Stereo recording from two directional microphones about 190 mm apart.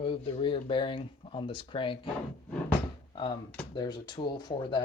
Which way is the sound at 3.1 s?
25° left (ahead or behind).